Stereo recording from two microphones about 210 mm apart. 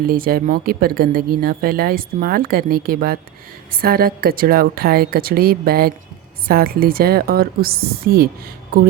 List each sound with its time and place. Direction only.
0.1 s speech: 45° right (ahead or behind)